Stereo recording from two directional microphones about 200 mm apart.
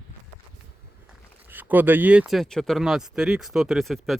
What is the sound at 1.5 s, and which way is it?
Speech, 10° right (ahead or behind).